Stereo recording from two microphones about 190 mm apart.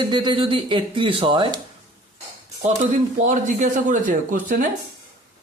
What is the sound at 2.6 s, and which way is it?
Speech, 45° right (ahead or behind).